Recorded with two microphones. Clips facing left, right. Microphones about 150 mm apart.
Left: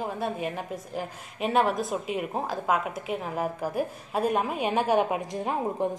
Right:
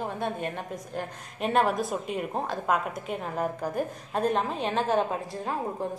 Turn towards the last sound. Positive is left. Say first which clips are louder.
# left 3 dB
turn(degrees=15)  # may be behind; listen again after turning